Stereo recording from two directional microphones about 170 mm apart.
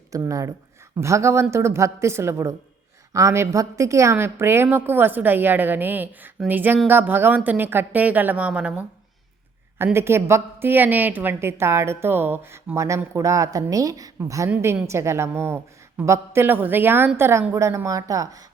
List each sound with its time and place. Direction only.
0.1 s a woman's voice: 20° right (ahead or behind)